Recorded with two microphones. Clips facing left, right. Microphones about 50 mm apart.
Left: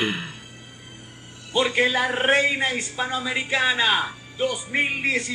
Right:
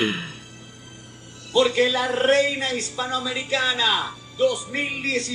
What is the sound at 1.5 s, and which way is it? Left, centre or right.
A man's voice, left.